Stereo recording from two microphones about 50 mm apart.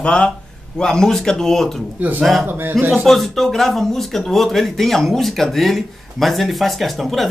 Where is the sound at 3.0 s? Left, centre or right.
Centre.